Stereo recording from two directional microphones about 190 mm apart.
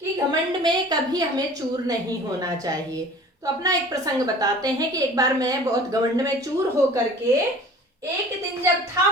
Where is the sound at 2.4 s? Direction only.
20° right (ahead or behind).